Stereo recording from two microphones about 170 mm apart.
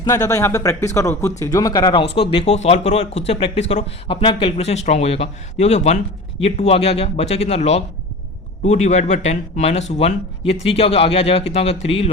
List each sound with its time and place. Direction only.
0.0 s speech: 20° left (ahead or behind); by 12.1 s 35° left (ahead or behind)